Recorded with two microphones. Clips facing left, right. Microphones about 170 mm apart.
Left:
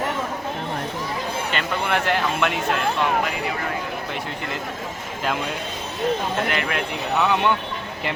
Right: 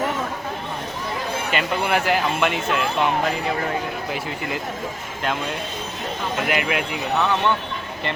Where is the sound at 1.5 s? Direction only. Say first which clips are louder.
Right 3 dB; 5° right (ahead or behind).